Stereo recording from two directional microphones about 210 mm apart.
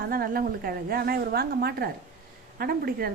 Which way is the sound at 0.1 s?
45° right (ahead or behind).